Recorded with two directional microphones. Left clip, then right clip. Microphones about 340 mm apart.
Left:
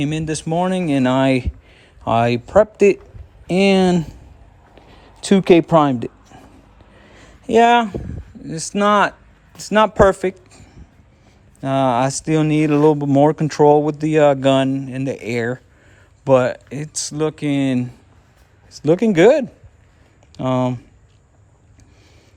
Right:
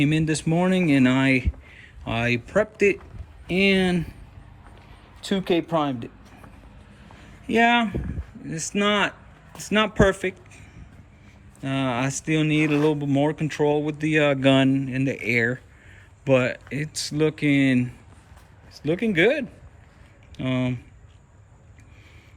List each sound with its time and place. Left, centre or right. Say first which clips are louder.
0.0 s speech: even; centre
5.2 s speech: left 11 dB; left
7.2 s a sound: left 7 dB; centre
8.4 s speech: left 7 dB; centre
11.6 s speech: left 9 dB; centre